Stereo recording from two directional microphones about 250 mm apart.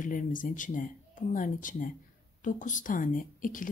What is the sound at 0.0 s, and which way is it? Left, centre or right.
Speech, left.